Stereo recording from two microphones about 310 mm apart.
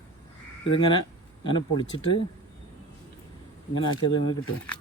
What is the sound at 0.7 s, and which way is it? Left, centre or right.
Speech, centre.